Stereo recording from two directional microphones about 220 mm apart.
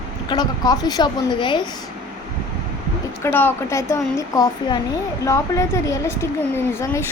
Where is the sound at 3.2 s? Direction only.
10° left (ahead or behind).